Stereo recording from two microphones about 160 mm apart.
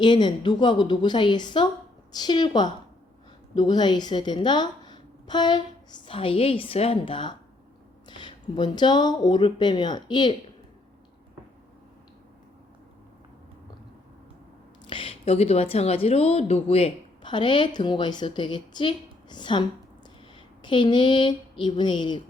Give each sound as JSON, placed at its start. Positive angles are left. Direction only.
{"t": 0.0, "sound": "a woman's voice", "side_deg": 30}
{"t": 14.8, "sound": "a woman's voice", "side_deg": 35}